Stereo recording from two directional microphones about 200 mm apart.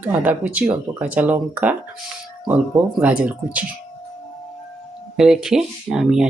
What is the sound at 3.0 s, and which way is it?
Speech, 10° right (ahead or behind).